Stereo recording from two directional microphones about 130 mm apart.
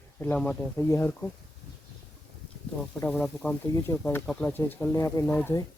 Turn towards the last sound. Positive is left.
turn(degrees=15)  # may be behind; listen again after turning